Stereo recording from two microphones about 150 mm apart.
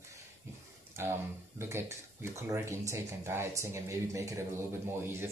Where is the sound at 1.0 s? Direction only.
15° right (ahead or behind).